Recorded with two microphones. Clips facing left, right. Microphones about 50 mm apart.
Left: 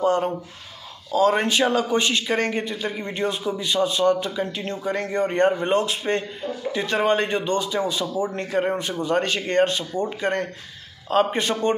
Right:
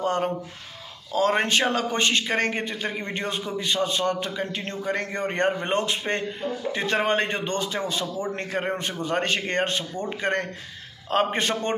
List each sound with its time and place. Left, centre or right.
0.0 s a man's voice: right